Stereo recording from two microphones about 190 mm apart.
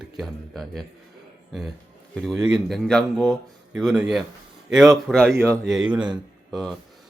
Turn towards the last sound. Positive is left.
turn(degrees=0)  # may be behind; listen again after turning